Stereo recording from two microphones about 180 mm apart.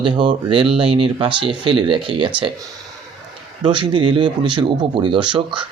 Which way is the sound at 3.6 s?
25° right (ahead or behind).